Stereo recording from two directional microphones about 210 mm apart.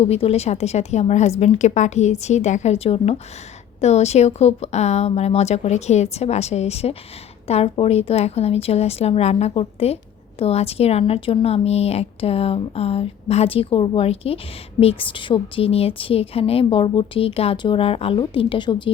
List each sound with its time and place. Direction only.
0.0 s a woman's voice: 30° left (ahead or behind)